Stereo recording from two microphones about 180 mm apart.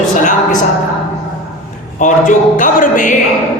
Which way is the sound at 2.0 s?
45° left (ahead or behind).